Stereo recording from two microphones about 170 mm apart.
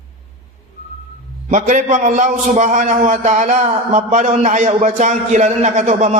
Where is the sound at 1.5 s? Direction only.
45° right (ahead or behind).